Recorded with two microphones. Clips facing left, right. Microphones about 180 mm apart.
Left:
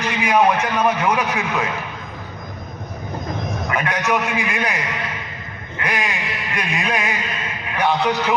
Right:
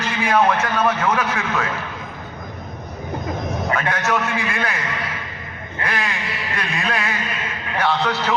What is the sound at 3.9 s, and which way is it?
Speech, 15° left (ahead or behind).